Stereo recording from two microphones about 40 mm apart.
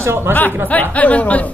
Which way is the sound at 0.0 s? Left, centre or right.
Right.